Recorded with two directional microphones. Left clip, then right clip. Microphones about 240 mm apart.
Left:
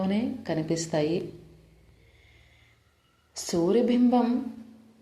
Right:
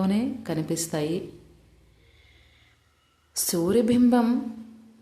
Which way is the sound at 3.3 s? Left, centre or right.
Centre.